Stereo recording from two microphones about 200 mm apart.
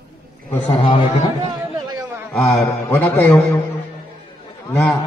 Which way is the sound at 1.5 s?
20° right (ahead or behind).